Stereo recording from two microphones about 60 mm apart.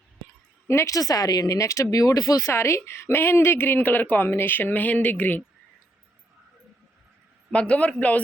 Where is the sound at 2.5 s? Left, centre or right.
Left.